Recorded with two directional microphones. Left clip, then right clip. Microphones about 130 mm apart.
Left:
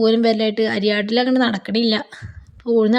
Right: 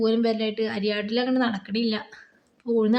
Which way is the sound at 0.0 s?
40° left (ahead or behind).